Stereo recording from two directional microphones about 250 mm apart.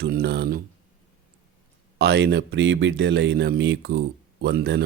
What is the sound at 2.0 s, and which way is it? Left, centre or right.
Speech, right.